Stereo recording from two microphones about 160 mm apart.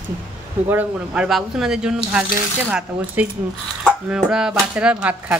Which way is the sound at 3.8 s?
5° right (ahead or behind).